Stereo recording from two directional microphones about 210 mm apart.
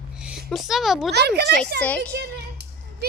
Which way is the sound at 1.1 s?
50° right (ahead or behind).